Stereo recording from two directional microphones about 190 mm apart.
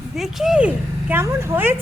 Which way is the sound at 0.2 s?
Centre (ahead or behind).